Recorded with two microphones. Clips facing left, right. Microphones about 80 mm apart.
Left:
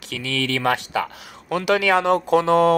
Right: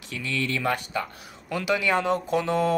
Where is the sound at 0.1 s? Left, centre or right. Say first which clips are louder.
Left 4 dB; left.